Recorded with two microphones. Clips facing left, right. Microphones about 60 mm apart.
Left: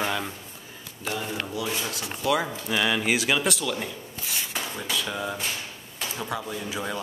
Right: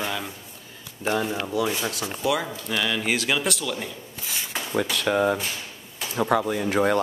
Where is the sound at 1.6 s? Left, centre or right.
Right.